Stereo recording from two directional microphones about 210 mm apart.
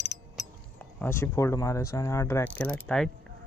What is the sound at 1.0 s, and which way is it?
Speech, 10° left (ahead or behind).